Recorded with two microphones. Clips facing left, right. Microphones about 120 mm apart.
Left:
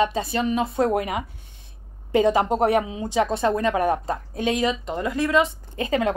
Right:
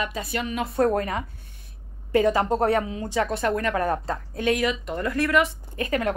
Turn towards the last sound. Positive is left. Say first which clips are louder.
# left 2 dB
turn(degrees=20)  # may be behind; listen again after turning